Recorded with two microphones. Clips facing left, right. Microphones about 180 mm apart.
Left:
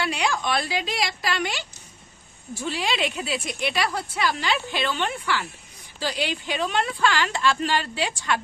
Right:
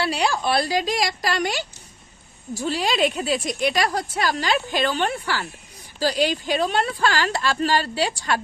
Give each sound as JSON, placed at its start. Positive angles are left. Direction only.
{"t": 0.0, "sound": "speech", "side_deg": -35}